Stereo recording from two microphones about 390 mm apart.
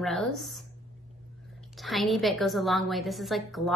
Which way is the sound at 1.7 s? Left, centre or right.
Centre.